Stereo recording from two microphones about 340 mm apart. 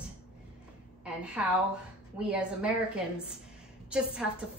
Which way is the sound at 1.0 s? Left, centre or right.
Centre.